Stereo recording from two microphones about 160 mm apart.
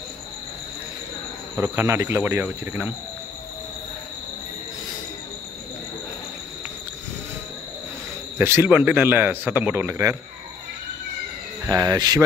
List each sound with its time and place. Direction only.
1.6 s a man's voice: 15° right (ahead or behind)
8.4 s a man's voice: 15° right (ahead or behind)
11.6 s speech: 25° right (ahead or behind)